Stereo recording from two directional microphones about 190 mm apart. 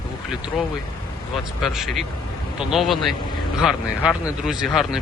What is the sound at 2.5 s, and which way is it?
Speech, centre (ahead or behind).